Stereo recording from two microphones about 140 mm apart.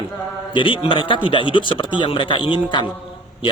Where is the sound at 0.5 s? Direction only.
35° left (ahead or behind).